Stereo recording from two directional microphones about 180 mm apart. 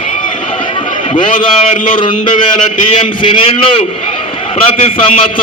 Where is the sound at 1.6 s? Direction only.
45° left (ahead or behind).